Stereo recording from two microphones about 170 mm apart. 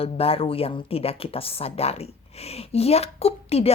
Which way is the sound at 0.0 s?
35° left (ahead or behind).